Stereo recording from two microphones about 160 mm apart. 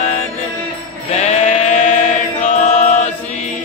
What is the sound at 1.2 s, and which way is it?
Sheep, 45° left (ahead or behind).